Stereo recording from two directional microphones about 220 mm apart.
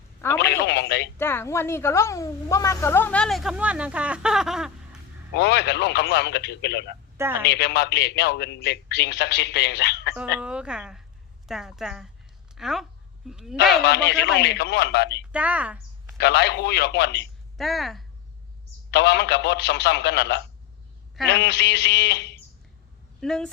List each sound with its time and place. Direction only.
0.4 s telephone: 50° left (ahead or behind)
1.2 s a woman's voice: 10° left (ahead or behind)
5.4 s a man's voice: 50° left (ahead or behind)
7.2 s speech: 10° right (ahead or behind)
7.4 s a man's voice: 50° left (ahead or behind)
10.4 s a woman's voice: 5° right (ahead or behind)
13.8 s a man's voice: 50° left (ahead or behind)
15.3 s speech: 5° right (ahead or behind)
16.1 s a man's voice: 50° left (ahead or behind)
17.6 s a woman's voice: centre (ahead or behind)
18.9 s a man's voice: 50° left (ahead or behind)
23.2 s a woman's voice: 5° left (ahead or behind)